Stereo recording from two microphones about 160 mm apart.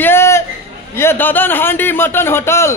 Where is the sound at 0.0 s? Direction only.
15° left (ahead or behind).